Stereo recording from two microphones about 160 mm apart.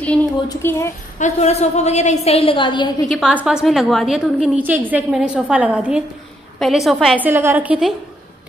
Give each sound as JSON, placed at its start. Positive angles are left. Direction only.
{"t": 0.5, "sound": "a woman's voice", "side_deg": 15}
{"t": 1.2, "sound": "a woman's voice", "side_deg": 45}
{"t": 3.1, "sound": "a woman's voice", "side_deg": -5}
{"t": 7.2, "sound": "a woman's voice", "side_deg": -15}